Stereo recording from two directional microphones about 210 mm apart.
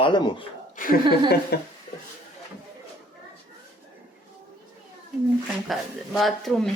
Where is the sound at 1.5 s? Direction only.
50° left (ahead or behind).